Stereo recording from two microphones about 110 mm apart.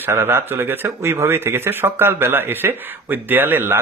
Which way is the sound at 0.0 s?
20° right (ahead or behind).